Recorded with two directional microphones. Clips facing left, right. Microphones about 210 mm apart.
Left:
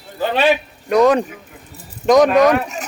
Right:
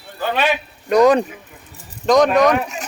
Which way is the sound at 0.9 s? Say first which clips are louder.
Even; centre (ahead or behind).